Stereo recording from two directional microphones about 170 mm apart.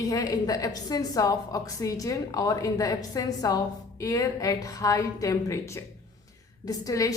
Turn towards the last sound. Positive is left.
turn(degrees=20)  # may be behind; listen again after turning